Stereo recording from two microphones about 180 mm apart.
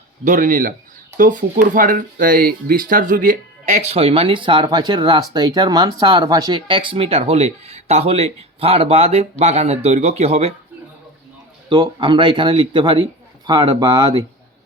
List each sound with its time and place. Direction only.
0.3 s speech: 45° right (ahead or behind)
11.7 s speech: 25° right (ahead or behind)